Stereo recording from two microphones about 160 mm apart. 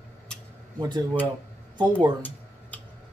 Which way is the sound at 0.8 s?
30° right (ahead or behind).